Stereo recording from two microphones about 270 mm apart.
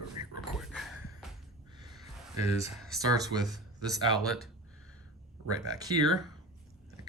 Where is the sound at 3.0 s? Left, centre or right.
Centre.